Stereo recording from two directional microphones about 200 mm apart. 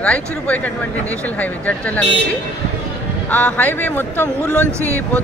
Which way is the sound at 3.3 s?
5° left (ahead or behind).